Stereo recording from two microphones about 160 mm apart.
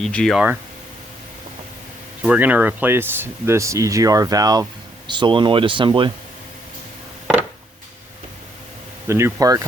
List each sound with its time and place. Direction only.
0.0 s speech: 5° left (ahead or behind)
0.3 s speech: 10° right (ahead or behind)
2.2 s speech: 10° right (ahead or behind); by 6.1 s 30° right (ahead or behind)
9.0 s speech: 15° right (ahead or behind)